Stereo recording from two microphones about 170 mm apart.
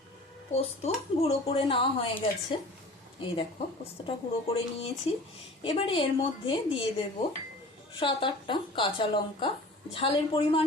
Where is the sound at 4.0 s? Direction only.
30° left (ahead or behind).